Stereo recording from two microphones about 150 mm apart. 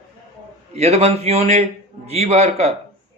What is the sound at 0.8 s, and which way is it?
A man's voice, 45° right (ahead or behind).